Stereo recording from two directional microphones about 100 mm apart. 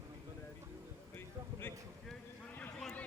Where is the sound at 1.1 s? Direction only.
20° left (ahead or behind).